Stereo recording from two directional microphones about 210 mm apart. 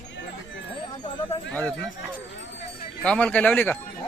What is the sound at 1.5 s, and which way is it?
Speech, 5° left (ahead or behind).